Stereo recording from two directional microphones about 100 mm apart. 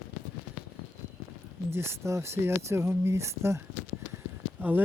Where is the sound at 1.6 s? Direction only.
25° right (ahead or behind).